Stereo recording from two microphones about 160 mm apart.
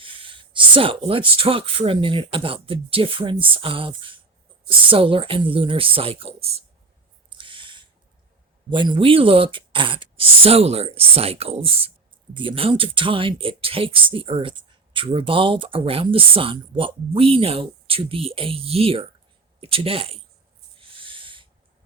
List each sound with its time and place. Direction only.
0.0 s speech: 35° right (ahead or behind)
7.3 s owl: 30° right (ahead or behind)
8.7 s speech: 30° right (ahead or behind)
20.7 s owl: 35° right (ahead or behind)